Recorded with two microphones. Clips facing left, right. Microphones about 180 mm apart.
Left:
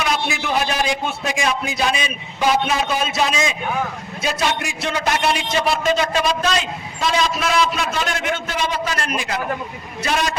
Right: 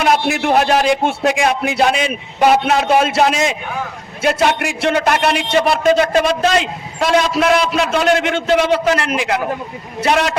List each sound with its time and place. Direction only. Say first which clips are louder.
0.0 s a man's voice: right 7 dB; 55° right (ahead or behind)